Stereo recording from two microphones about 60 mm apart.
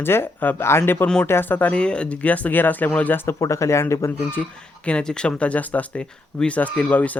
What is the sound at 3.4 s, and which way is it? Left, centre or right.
Speech, left.